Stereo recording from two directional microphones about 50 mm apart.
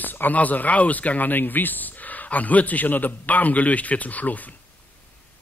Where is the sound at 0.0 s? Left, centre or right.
Left.